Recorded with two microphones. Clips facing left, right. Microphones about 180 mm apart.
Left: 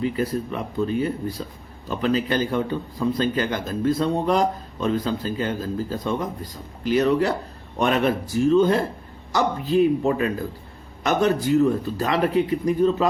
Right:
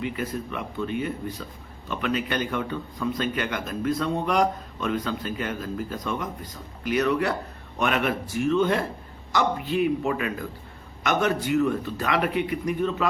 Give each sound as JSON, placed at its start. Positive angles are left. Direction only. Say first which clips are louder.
{"t": 0.0, "sound": "a man's voice", "louder": "left 6 dB", "side_deg": 35}